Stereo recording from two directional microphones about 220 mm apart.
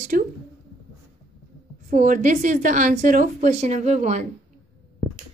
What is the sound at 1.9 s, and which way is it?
A woman's voice, 35° right (ahead or behind).